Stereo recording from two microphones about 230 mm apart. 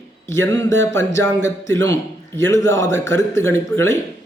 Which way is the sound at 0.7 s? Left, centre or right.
Right.